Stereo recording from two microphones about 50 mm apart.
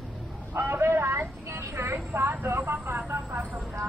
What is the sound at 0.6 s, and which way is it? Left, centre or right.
Vehicle, right.